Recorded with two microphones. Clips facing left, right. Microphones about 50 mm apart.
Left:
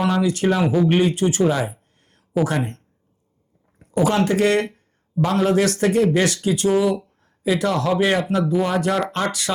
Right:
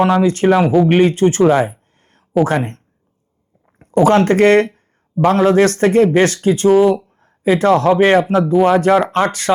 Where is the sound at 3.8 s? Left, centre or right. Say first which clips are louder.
Right 7 dB; right.